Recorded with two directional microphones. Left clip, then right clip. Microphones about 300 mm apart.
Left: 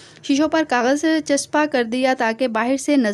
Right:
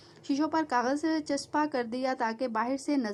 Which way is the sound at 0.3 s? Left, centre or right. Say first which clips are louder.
Left 11 dB; left.